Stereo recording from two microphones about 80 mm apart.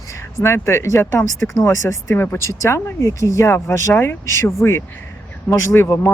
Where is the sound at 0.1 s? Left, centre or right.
Left.